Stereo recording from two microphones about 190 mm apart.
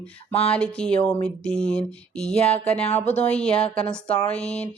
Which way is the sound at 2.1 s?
35° left (ahead or behind).